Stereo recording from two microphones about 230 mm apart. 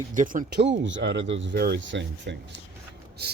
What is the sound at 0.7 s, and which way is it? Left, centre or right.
Speech, right.